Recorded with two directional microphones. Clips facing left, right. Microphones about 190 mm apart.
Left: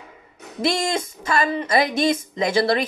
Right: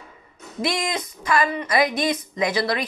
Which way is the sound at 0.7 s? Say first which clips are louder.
Left 4 dB; 25° left (ahead or behind).